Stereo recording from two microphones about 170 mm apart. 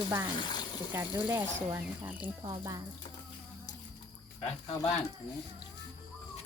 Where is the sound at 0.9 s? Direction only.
15° right (ahead or behind).